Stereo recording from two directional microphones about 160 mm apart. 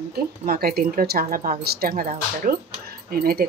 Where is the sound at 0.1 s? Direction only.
70° right (ahead or behind).